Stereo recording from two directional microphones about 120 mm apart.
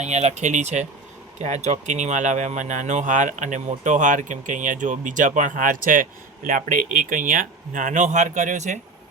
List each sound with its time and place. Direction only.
0.0 s speech: 70° right (ahead or behind)